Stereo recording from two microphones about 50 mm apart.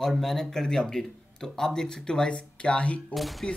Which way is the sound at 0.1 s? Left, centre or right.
Centre.